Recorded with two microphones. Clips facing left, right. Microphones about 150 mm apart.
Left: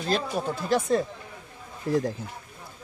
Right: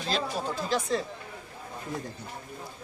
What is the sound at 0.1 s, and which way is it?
Speech, 55° left (ahead or behind).